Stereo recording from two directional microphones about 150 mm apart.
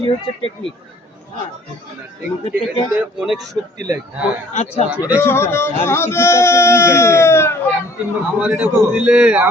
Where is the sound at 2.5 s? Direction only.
5° right (ahead or behind).